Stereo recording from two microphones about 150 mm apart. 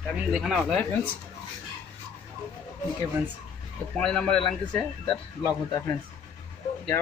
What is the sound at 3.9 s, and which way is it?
Speech, 5° left (ahead or behind).